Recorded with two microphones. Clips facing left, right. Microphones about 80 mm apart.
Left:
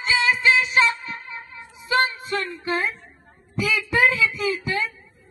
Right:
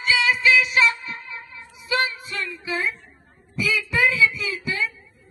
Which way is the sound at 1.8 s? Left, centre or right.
Left.